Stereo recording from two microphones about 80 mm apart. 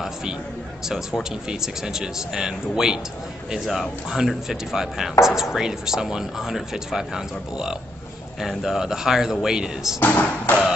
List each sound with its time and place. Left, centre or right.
0.0 s a sound: centre
0.8 s speech: centre
9.9 s speech: left